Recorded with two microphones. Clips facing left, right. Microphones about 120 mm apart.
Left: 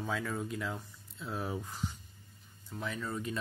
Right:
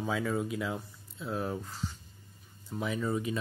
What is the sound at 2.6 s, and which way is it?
Speech, 10° right (ahead or behind).